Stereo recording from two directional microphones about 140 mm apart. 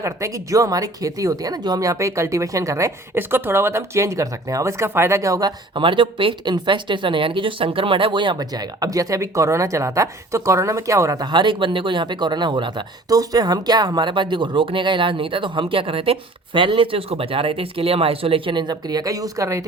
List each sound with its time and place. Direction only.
0.0 s speech: 20° right (ahead or behind)